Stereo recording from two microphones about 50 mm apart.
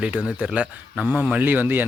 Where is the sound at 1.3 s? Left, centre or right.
Right.